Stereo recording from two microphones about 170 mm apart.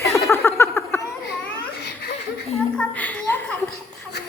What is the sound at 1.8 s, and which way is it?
Laughter, 75° left (ahead or behind).